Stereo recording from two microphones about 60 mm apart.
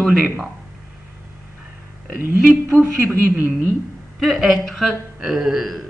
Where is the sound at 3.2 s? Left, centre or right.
Right.